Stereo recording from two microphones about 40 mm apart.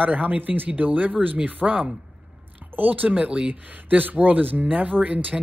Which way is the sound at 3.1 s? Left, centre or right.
Right.